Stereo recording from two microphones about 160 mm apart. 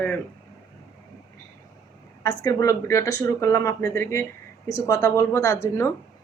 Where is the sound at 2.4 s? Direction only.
20° left (ahead or behind).